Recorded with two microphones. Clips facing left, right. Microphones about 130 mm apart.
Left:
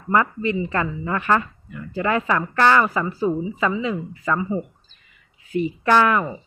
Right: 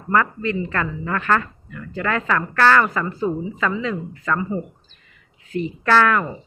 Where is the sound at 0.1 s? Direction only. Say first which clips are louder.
Even; 15° left (ahead or behind).